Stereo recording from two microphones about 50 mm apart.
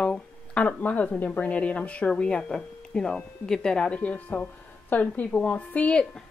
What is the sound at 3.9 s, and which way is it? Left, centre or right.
Speech, left.